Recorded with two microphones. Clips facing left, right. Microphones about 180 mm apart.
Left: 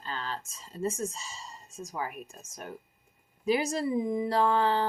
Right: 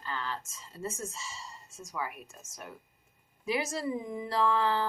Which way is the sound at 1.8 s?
35° left (ahead or behind).